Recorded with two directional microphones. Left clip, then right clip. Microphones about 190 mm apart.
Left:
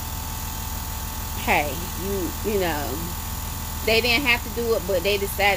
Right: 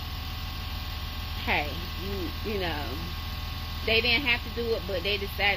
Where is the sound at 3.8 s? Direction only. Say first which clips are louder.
Left 4 dB; 15° left (ahead or behind).